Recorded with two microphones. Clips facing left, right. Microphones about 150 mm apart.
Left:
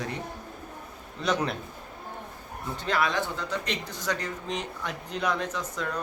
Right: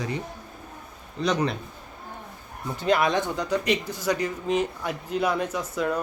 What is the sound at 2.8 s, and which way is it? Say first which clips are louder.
A man's voice: right 5 dB; 20° right (ahead or behind).